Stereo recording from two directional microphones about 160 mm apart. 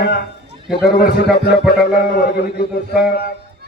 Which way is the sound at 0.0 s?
90° left.